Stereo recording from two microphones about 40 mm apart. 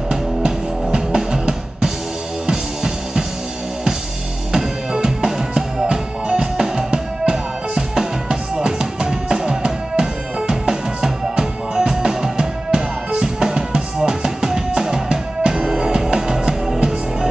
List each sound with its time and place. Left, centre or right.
0.9 s music: centre
4.5 s music: centre